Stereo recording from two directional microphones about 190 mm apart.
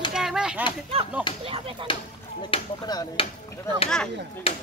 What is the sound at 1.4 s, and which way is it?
Speech, 30° right (ahead or behind).